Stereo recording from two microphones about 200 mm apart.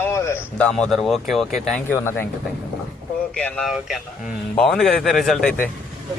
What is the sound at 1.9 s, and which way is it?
Speech, 10° left (ahead or behind).